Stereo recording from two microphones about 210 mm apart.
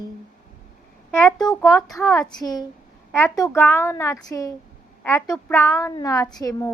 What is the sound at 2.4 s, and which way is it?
A woman's voice, 20° left (ahead or behind).